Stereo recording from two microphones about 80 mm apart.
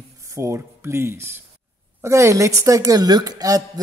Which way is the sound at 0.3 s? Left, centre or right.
Right.